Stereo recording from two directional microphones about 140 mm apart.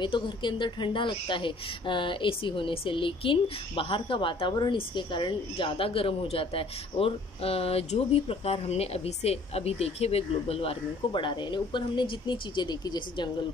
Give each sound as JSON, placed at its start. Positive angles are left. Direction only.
{"t": 0.0, "sound": "speech", "side_deg": 35}